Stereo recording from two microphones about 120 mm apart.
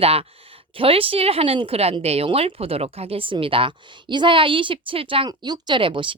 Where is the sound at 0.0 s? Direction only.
55° right (ahead or behind).